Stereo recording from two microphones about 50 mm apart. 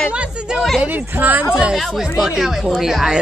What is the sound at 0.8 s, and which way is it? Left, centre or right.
Speech, right.